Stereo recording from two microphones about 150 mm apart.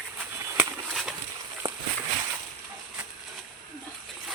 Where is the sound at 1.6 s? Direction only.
30° right (ahead or behind).